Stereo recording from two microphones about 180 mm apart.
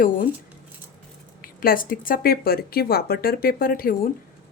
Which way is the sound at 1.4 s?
50° left (ahead or behind).